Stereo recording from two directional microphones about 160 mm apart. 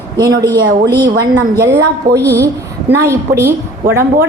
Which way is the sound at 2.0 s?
75° right (ahead or behind).